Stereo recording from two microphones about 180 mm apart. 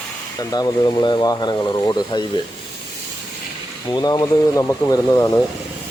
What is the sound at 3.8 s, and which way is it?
Speech, 20° left (ahead or behind).